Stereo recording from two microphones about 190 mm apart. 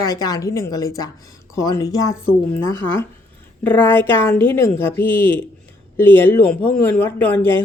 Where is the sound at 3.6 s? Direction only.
10° left (ahead or behind).